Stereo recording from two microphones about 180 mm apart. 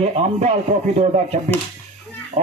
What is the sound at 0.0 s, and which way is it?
Speech, 35° right (ahead or behind).